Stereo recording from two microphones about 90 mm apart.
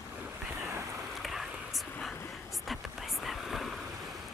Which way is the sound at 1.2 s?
Centre (ahead or behind).